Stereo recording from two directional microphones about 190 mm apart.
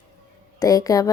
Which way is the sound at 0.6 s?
20° left (ahead or behind).